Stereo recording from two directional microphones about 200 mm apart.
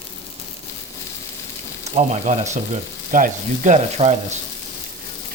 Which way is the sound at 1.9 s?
35° right (ahead or behind).